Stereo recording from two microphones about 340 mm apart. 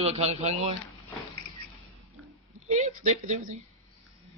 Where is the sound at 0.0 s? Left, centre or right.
Centre.